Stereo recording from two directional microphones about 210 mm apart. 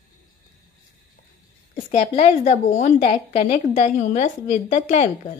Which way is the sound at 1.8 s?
30° left (ahead or behind).